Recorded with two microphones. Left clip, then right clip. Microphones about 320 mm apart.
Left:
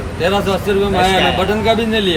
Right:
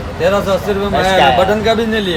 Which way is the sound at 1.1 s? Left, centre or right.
Right.